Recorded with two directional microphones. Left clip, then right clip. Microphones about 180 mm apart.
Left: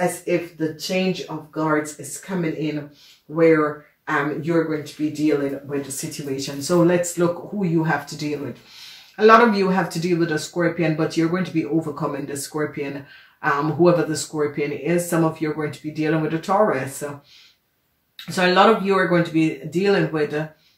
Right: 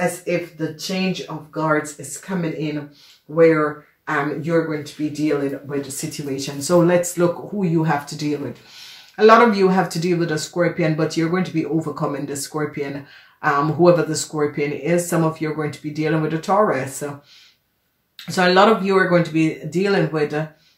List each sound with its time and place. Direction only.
0.8 s speech: 35° right (ahead or behind)
18.1 s speech: 30° right (ahead or behind)